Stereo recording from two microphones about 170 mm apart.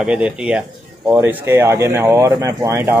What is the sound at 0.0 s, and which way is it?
Speech, 5° right (ahead or behind).